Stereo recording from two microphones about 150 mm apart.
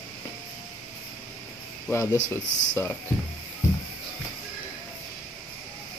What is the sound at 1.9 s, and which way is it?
Speech, 20° left (ahead or behind).